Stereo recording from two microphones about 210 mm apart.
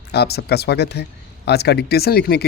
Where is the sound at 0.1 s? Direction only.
50° left (ahead or behind).